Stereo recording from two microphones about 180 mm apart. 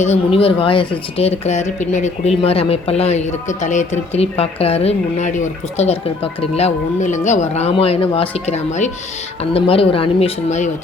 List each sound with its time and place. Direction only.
0.0 s speech: 35° left (ahead or behind)